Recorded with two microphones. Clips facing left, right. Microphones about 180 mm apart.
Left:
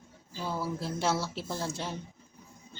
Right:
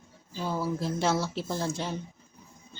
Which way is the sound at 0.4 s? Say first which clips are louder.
Right 3 dB; 15° right (ahead or behind).